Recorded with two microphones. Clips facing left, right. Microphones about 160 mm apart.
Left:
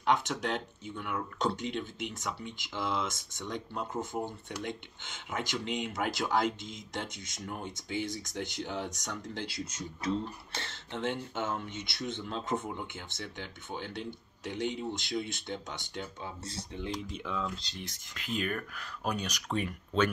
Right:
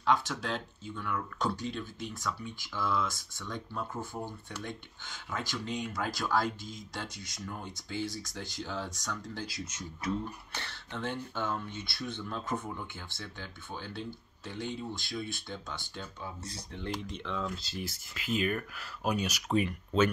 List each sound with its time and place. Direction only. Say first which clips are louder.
0.0 s speech: even; 20° left (ahead or behind)
16.7 s speech: even; 5° left (ahead or behind)
17.6 s speech: right 5 dB; 5° right (ahead or behind)